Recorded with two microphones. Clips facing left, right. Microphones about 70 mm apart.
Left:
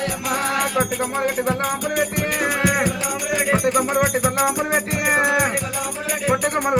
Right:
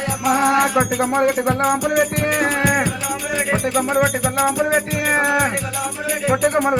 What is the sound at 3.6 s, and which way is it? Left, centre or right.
Music, centre.